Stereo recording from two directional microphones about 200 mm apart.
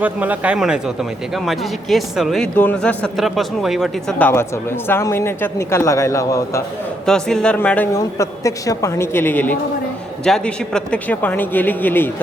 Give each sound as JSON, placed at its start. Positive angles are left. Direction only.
{"t": 0.0, "sound": "a man's voice", "side_deg": -10}
{"t": 4.3, "sound": "a woman's voice", "side_deg": 10}
{"t": 7.0, "sound": "a woman's voice", "side_deg": 5}